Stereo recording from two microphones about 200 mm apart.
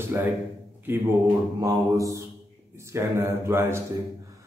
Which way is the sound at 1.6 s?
15° right (ahead or behind).